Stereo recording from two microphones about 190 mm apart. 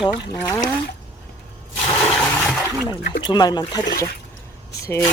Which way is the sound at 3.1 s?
25° left (ahead or behind).